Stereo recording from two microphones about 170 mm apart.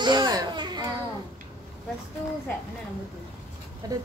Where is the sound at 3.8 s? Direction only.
20° right (ahead or behind).